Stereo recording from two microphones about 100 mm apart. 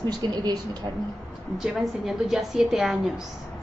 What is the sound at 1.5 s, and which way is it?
A woman's voice, 5° right (ahead or behind).